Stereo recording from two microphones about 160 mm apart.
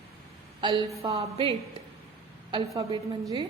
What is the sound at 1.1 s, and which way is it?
Speech, 40° right (ahead or behind).